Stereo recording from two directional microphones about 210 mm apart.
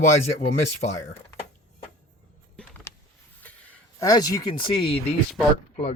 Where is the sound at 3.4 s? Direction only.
10° left (ahead or behind).